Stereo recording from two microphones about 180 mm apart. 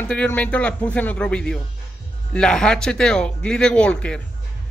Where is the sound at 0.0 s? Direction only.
10° left (ahead or behind).